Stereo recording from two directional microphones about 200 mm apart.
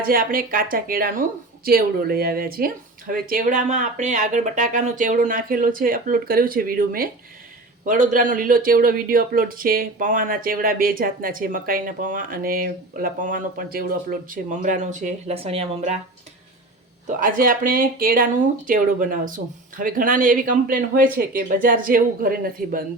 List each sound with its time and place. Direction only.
0.0 s speech: 45° right (ahead or behind)
17.2 s speech: 45° right (ahead or behind)